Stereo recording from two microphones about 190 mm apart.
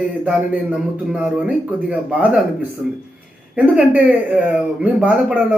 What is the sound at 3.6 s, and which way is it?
Speech, 5° right (ahead or behind).